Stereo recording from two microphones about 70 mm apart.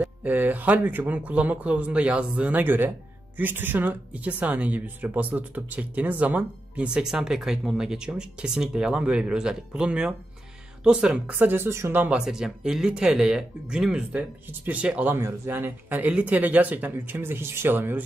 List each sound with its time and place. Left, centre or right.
0.2 s speech: right
11.3 s a man's voice: right
12.2 s speech: centre
15.1 s a man's voice: right